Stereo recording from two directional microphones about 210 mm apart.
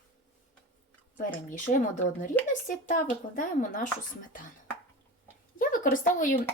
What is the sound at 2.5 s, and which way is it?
Speech, 40° left (ahead or behind).